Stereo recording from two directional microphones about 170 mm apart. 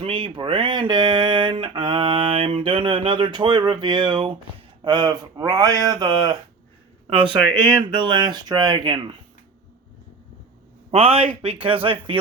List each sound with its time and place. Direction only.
0.0 s speech: 30° right (ahead or behind)
10.9 s speech: 35° right (ahead or behind)